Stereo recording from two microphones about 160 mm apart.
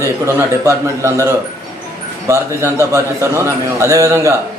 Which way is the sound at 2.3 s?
20° right (ahead or behind).